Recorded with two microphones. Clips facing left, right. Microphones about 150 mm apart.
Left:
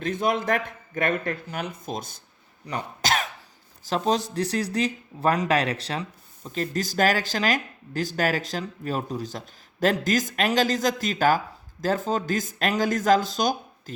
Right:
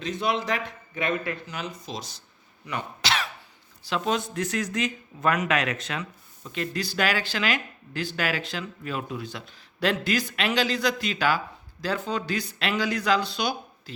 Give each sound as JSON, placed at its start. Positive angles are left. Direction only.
{"t": 0.0, "sound": "speech", "side_deg": 50}
{"t": 2.6, "sound": "cough", "side_deg": 40}
{"t": 3.8, "sound": "speech", "side_deg": 40}